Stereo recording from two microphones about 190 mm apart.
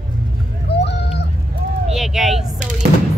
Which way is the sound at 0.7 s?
65° left (ahead or behind).